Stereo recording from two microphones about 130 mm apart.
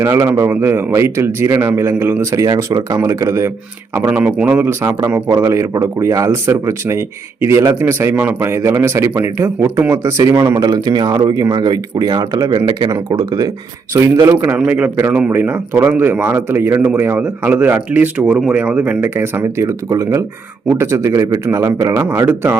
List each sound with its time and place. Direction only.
0.0 s a man's voice: 20° right (ahead or behind)
4.1 s a man's voice: 10° right (ahead or behind)
10.6 s a man's voice: 30° right (ahead or behind)